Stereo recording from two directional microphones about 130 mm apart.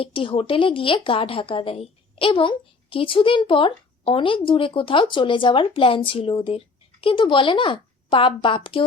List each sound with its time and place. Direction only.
0.0 s a woman's voice: 40° left (ahead or behind)